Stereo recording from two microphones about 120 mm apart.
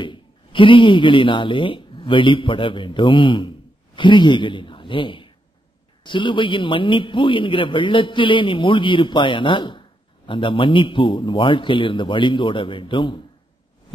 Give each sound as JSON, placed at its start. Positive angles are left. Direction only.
{"t": 0.0, "sound": "a man's voice", "side_deg": 45}